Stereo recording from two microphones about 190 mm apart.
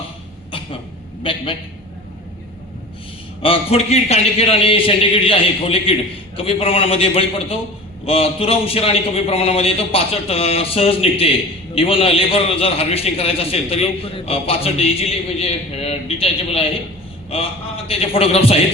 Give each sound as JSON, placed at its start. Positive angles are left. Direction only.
{"t": 1.2, "sound": "a man's voice", "side_deg": 25}
{"t": 3.4, "sound": "a man's voice", "side_deg": 30}